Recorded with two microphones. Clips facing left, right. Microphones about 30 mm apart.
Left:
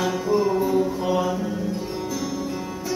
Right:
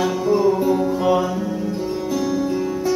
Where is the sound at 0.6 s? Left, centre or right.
Right.